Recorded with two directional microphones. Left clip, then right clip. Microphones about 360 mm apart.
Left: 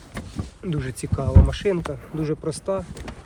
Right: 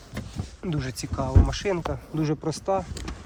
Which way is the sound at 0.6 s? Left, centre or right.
Centre.